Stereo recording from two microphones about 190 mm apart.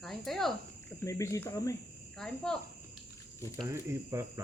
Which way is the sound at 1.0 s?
15° left (ahead or behind).